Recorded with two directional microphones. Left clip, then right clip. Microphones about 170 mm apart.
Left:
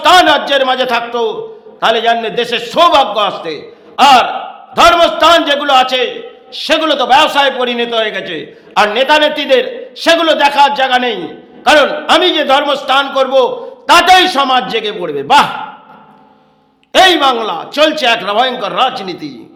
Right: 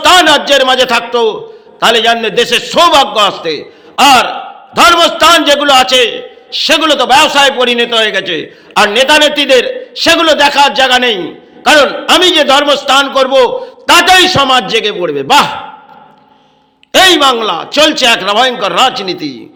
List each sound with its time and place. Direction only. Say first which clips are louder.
0.0 s a man's voice: right 1 dB; 15° right (ahead or behind)
16.9 s a man's voice: right 2 dB; 15° right (ahead or behind)